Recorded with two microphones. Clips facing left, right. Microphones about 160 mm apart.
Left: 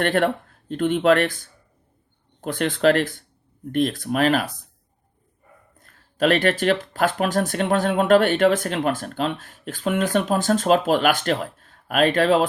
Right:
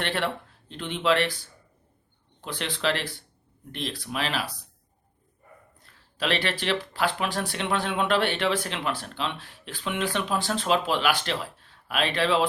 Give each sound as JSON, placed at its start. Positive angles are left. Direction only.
{"t": 0.0, "sound": "speech", "side_deg": 50}
{"t": 5.8, "sound": "speech", "side_deg": 50}